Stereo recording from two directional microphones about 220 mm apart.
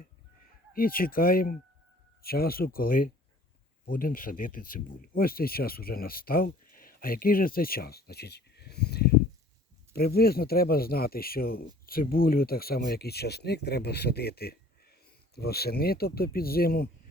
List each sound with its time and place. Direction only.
0.7 s speech: 40° left (ahead or behind)